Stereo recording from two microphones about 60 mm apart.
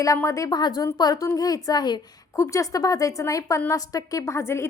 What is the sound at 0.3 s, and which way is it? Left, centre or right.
Speech, left.